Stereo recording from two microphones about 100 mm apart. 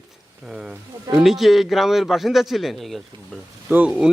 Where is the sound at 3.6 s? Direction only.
15° right (ahead or behind).